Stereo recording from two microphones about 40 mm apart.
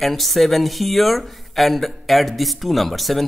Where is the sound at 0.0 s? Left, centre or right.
Centre.